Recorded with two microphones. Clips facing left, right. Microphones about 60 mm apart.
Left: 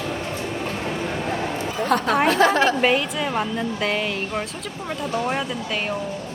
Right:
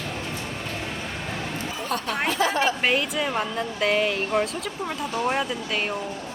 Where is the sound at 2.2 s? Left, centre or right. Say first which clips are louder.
Left 4 dB; left.